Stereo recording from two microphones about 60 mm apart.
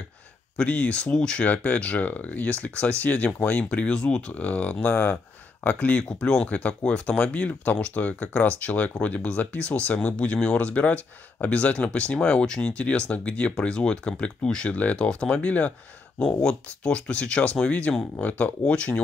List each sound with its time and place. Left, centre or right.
0.6 s speech: left
4.3 s speech: left
6.0 s speech: centre
16.3 s speech: centre